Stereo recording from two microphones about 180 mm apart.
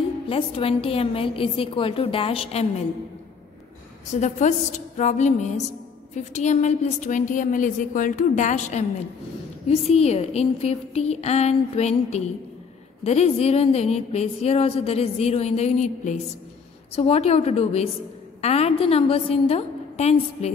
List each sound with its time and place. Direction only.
0.3 s a woman's voice: 30° left (ahead or behind)
4.1 s a woman's voice: 40° left (ahead or behind)